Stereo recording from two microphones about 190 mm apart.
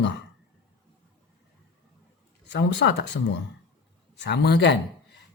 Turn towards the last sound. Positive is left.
turn(degrees=65)  # may be behind; listen again after turning